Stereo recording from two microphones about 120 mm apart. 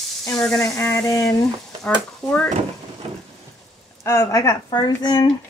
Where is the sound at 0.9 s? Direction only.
25° left (ahead or behind).